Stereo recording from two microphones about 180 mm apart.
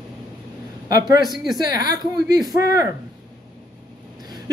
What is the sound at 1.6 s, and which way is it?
Speech, 20° right (ahead or behind).